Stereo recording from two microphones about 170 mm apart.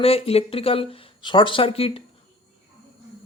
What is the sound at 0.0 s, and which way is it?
Speech, 35° left (ahead or behind).